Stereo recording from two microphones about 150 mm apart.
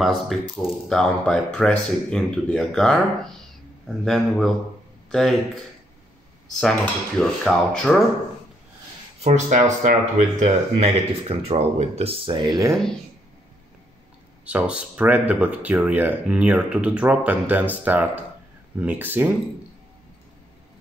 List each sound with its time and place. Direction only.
0.0 s speech: centre (ahead or behind)
7.2 s speech: 5° left (ahead or behind)
9.2 s speech: 50° right (ahead or behind); by 12.7 s 25° right (ahead or behind)
14.4 s speech: 10° right (ahead or behind)